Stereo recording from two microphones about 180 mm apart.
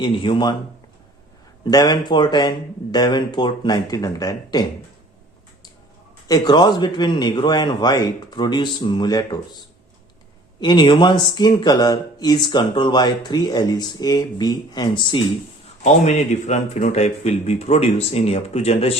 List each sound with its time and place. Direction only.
0.0 s speech: 25° left (ahead or behind)
1.6 s speech: 25° left (ahead or behind)
6.2 s speech: 20° left (ahead or behind)
15.8 s speech: 40° left (ahead or behind)